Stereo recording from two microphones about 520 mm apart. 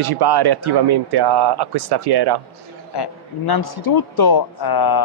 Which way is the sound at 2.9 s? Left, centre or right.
Left.